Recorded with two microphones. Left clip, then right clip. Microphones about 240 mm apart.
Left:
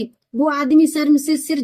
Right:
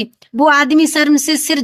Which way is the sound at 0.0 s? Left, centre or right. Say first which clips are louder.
Right 7 dB; right.